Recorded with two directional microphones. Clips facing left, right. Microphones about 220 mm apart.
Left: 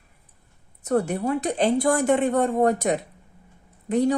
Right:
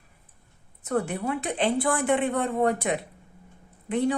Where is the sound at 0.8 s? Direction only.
40° left (ahead or behind).